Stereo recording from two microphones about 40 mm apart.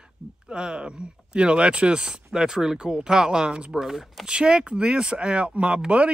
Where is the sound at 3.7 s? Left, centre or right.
Centre.